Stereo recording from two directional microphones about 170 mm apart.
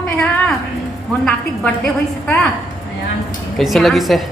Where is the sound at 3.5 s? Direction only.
Centre (ahead or behind).